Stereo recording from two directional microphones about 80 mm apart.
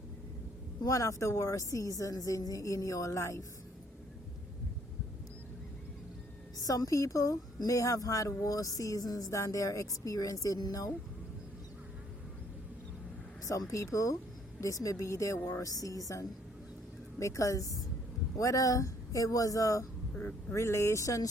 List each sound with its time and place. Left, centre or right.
0.8 s a woman's voice: left
6.6 s a woman's voice: left
13.4 s a woman's voice: left